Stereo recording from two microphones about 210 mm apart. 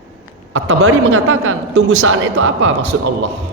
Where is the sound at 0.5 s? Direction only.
75° right (ahead or behind).